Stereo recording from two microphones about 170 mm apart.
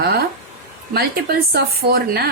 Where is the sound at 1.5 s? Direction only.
70° right (ahead or behind).